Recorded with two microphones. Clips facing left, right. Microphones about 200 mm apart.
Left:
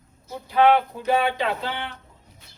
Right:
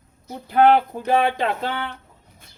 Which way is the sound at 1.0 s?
50° right (ahead or behind).